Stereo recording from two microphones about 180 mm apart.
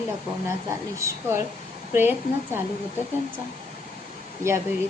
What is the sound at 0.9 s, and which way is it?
A woman's voice, 15° right (ahead or behind).